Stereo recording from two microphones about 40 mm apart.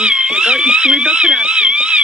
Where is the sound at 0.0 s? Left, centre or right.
Right.